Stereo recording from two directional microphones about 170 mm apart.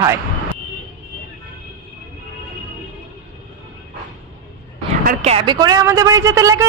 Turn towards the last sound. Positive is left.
turn(degrees=-20)  # may be behind; listen again after turning